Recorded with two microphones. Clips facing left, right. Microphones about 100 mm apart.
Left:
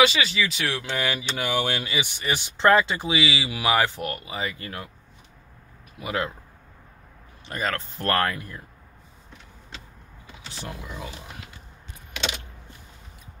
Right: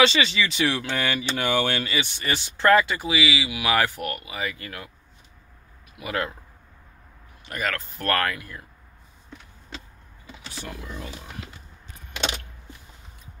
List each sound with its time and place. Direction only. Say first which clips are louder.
0.0 s speech: even; 5° left (ahead or behind); by 3.6 s 35° left (ahead or behind)
3.6 s speech: left 1 dB; 20° left (ahead or behind)
5.9 s speech: even; 25° left (ahead or behind)
7.4 s speech: left 1 dB; 30° left (ahead or behind)